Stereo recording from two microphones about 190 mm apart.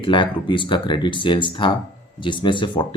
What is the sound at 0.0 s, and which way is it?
Speech, 25° left (ahead or behind).